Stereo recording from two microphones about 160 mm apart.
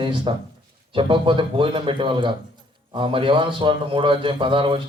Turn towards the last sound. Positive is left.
turn(degrees=-30)  # may be behind; listen again after turning